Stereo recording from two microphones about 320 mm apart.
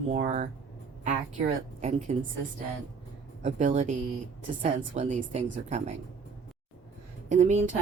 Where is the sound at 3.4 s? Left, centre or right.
Right.